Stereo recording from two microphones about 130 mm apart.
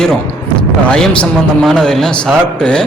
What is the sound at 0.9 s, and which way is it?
A man's voice, 5° left (ahead or behind).